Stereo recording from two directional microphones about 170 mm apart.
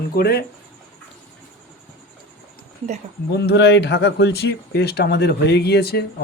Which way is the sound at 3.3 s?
75° left (ahead or behind).